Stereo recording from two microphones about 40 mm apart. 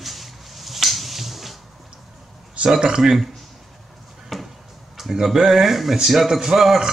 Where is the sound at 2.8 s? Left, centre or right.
Centre.